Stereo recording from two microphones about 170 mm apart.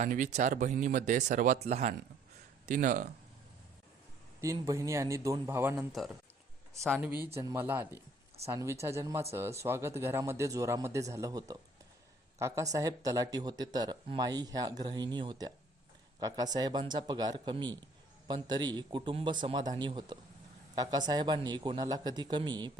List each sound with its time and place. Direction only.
0.0 s speech: 45° right (ahead or behind)
4.4 s speech: 20° right (ahead or behind)
7.0 s speech: 10° right (ahead or behind)